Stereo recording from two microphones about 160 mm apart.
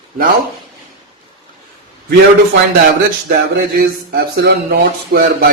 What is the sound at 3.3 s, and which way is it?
Speech, 70° right (ahead or behind).